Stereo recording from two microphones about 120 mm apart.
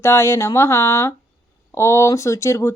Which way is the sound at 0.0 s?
20° left (ahead or behind).